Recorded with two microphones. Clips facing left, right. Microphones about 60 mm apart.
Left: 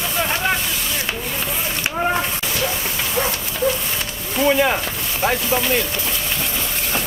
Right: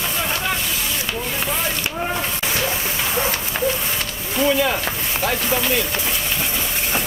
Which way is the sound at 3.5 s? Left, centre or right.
Right.